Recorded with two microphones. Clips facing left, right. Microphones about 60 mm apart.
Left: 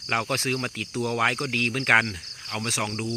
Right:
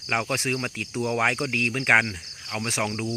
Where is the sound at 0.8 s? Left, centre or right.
Right.